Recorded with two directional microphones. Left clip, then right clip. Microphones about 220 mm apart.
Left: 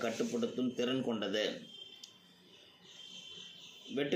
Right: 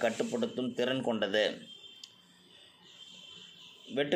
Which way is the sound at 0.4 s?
40° right (ahead or behind).